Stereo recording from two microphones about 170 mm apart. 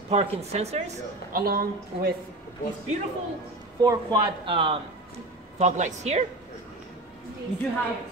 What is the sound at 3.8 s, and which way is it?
Speech, 25° right (ahead or behind).